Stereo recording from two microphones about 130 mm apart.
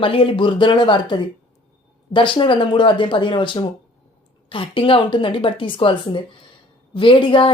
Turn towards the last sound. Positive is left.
turn(degrees=40)  # may be behind; listen again after turning